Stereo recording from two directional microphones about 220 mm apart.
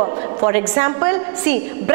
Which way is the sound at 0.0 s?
25° right (ahead or behind).